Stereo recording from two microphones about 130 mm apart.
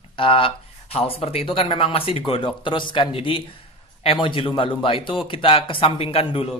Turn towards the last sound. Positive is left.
turn(degrees=45)  # may be behind; listen again after turning